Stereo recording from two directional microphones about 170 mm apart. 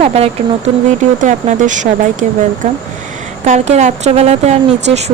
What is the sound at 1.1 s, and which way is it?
Speech, 45° right (ahead or behind).